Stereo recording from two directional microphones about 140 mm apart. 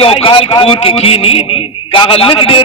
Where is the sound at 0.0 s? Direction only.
40° left (ahead or behind).